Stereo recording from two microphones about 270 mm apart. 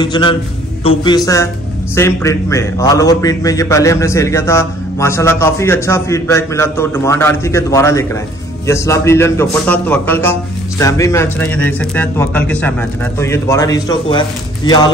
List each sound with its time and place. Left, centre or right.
0.0 s a man's voice: centre